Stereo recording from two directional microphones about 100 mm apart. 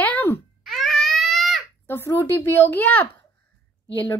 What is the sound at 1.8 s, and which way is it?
A woman's voice, 25° left (ahead or behind).